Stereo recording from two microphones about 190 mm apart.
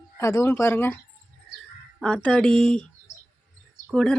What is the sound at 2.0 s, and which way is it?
Speech, 5° left (ahead or behind).